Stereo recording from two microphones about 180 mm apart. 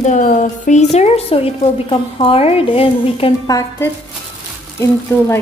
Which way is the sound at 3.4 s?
20° left (ahead or behind).